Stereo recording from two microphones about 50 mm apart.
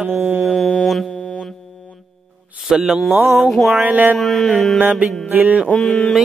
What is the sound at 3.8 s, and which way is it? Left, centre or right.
Speech, right.